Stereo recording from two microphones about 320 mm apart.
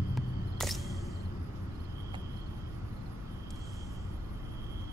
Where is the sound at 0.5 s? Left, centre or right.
Centre.